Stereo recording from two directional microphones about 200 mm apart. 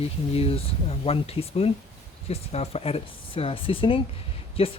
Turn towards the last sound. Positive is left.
turn(degrees=30)  # may be behind; listen again after turning